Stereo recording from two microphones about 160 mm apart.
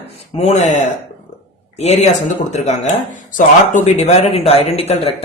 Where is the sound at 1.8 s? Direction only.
45° left (ahead or behind).